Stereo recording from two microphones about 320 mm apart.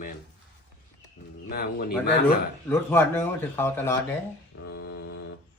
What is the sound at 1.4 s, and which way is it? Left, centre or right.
Speech, left.